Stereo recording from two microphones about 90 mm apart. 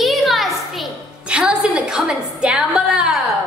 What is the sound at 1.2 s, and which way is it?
A woman's voice, 10° right (ahead or behind).